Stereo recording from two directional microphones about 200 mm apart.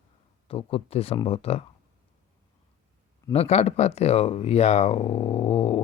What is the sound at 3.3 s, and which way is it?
Speech, 30° left (ahead or behind).